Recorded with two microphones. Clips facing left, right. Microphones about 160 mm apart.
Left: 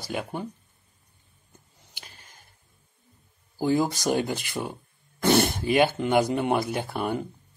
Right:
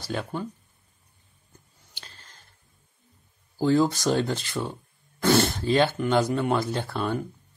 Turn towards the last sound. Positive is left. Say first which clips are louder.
# even
turn(degrees=15)  # may be behind; listen again after turning